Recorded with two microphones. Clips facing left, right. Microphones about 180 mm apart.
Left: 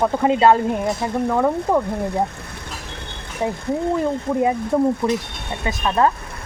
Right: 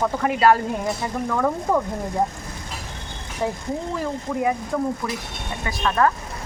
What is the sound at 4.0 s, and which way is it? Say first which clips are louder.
Speech: left 5 dB; 25° left (ahead or behind).